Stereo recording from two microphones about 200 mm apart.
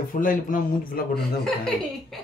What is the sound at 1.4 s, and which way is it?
Speech, 5° left (ahead or behind).